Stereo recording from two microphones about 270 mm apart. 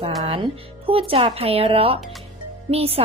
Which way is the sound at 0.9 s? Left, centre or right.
Centre.